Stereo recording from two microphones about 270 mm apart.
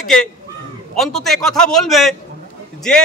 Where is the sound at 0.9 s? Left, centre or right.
Centre.